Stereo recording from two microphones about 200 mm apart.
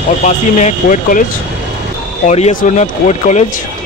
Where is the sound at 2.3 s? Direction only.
35° left (ahead or behind).